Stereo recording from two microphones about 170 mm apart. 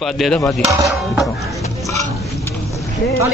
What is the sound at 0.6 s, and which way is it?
Speech, 20° right (ahead or behind).